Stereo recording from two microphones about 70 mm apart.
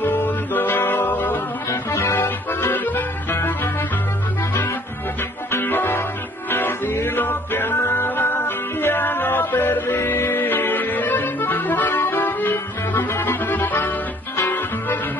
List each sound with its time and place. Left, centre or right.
0.0 s music: left
5.5 s music: left